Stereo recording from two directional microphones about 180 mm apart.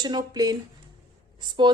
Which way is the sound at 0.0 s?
20° right (ahead or behind).